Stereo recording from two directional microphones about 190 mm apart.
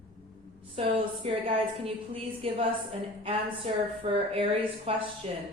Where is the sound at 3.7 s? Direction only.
30° right (ahead or behind).